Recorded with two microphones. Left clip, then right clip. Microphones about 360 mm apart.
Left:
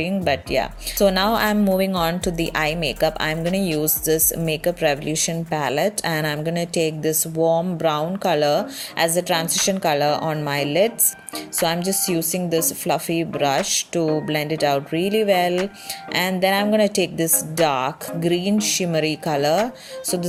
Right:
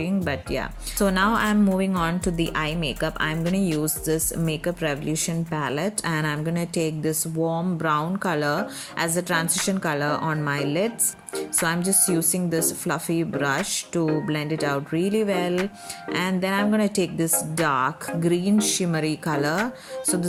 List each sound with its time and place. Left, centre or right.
0.0 s a woman's voice: centre
7.4 s speech: left
7.8 s a woman's voice: centre